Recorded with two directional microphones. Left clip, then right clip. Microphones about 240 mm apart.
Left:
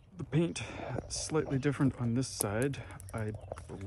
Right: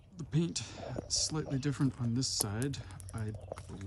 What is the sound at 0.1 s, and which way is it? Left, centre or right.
Speech, centre.